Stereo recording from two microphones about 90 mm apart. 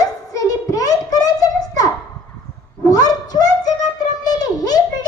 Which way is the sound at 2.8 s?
45° left (ahead or behind).